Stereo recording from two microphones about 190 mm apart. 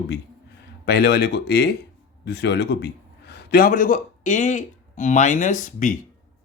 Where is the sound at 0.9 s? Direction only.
55° left (ahead or behind).